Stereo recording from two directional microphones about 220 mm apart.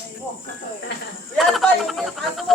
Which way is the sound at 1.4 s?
Centre (ahead or behind).